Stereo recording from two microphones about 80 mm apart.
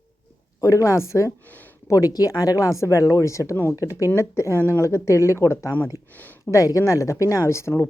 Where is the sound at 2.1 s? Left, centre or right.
Left.